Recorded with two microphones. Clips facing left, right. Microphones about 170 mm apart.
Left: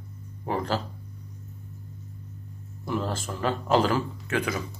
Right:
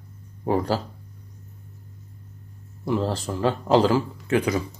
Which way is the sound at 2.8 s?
30° right (ahead or behind).